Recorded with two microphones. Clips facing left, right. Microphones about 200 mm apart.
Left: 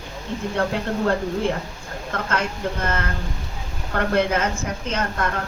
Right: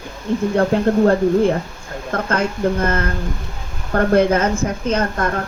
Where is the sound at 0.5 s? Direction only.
40° right (ahead or behind).